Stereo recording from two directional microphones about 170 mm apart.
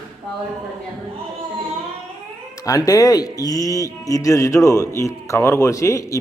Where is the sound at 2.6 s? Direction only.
20° left (ahead or behind).